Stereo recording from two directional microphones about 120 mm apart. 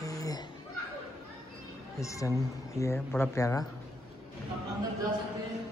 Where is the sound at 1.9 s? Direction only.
25° left (ahead or behind).